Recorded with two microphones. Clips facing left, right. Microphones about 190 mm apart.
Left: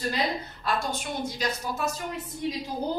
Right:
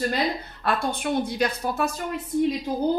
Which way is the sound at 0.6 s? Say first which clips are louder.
Right 4 dB; 55° right (ahead or behind).